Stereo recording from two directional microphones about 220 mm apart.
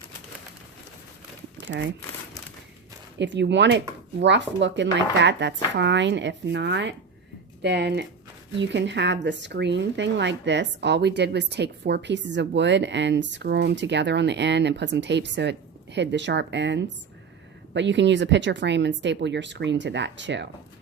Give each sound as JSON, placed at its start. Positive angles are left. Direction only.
{"t": 1.6, "sound": "speech", "side_deg": -50}
{"t": 3.2, "sound": "speech", "side_deg": -50}